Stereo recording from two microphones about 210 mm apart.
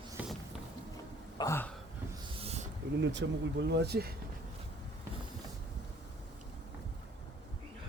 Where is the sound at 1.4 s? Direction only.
10° left (ahead or behind).